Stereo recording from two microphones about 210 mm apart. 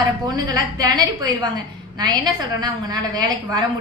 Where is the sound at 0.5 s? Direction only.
20° right (ahead or behind).